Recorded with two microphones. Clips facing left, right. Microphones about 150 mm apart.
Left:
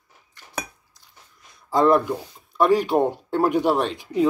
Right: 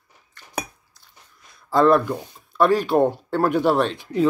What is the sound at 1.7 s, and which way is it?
Speech, 15° left (ahead or behind).